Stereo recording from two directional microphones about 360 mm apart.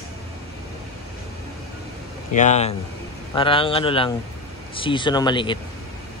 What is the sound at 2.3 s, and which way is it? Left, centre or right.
Speech, centre.